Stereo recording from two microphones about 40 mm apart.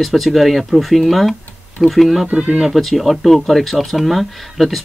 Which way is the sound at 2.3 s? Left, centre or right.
Right.